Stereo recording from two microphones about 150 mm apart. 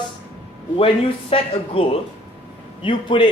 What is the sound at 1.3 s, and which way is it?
Speech, 40° left (ahead or behind).